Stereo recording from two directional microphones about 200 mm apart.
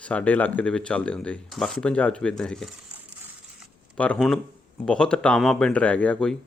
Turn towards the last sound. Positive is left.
turn(degrees=5)  # may be behind; listen again after turning